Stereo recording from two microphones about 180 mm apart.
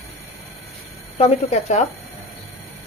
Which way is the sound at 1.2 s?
35° left (ahead or behind).